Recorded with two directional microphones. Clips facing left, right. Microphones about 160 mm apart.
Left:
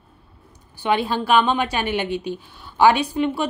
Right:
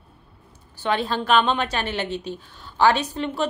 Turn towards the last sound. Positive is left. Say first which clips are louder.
# left 3 dB
turn(degrees=10)  # may be behind; listen again after turning